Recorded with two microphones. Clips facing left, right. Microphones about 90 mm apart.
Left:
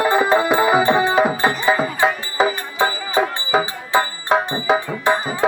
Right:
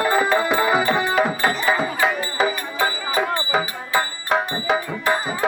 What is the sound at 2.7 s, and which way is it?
Music, 25° left (ahead or behind).